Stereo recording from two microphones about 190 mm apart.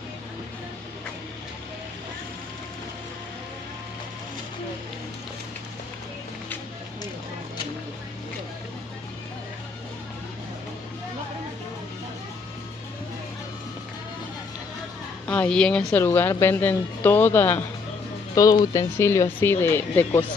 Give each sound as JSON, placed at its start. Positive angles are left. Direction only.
{"t": 15.2, "sound": "speech", "side_deg": 5}